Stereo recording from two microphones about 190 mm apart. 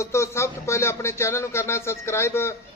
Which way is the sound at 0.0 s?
15° left (ahead or behind).